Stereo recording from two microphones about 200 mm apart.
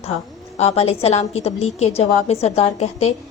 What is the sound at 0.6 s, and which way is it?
A woman's voice, 30° left (ahead or behind).